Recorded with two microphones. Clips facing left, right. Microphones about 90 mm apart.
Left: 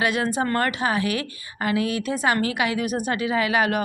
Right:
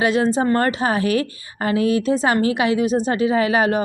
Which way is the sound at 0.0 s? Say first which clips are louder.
Right 5 dB; 30° right (ahead or behind).